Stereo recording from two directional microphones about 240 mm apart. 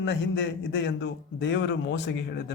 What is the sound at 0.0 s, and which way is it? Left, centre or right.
A man's voice, left.